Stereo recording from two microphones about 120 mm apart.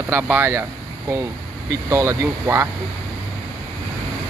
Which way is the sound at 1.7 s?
30° right (ahead or behind).